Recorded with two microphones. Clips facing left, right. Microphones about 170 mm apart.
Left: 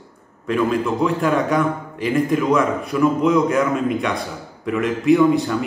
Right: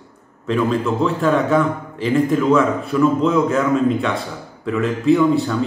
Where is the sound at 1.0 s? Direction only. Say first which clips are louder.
Right 2 dB; 10° left (ahead or behind).